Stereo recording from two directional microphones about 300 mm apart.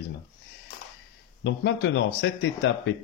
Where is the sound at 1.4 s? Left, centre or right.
Left.